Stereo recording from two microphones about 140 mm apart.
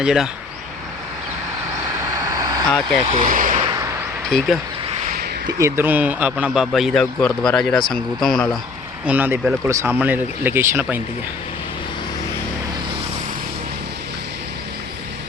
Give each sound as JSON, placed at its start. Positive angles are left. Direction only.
{"t": 0.0, "sound": "a man's voice", "side_deg": -5}
{"t": 2.2, "sound": "vehicle", "side_deg": -25}
{"t": 2.6, "sound": "a man's voice", "side_deg": 5}
{"t": 3.2, "sound": "vehicle", "side_deg": -70}
{"t": 4.3, "sound": "a man's voice", "side_deg": 0}
{"t": 5.0, "sound": "a sound", "side_deg": -90}
{"t": 5.5, "sound": "a man's voice", "side_deg": -20}
{"t": 9.0, "sound": "speech", "side_deg": -15}